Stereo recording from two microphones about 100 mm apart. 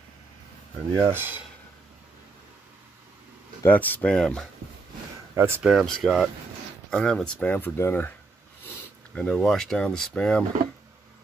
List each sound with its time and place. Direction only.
0.9 s speech: 25° right (ahead or behind)
3.6 s speech: 15° left (ahead or behind)
5.3 s speech: 25° right (ahead or behind)
5.6 s speech: 5° right (ahead or behind); by 8.1 s 25° left (ahead or behind)
9.1 s speech: 5° left (ahead or behind)